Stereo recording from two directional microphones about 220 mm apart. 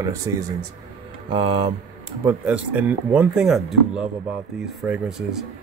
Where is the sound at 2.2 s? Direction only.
10° right (ahead or behind).